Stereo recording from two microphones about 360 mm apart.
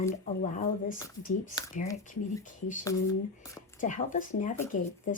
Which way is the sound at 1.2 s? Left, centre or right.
Left.